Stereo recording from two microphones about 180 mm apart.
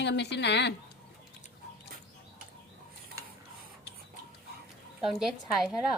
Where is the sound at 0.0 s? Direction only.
70° left (ahead or behind).